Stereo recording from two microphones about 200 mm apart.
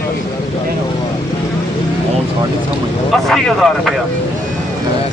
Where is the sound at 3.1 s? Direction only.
Centre (ahead or behind).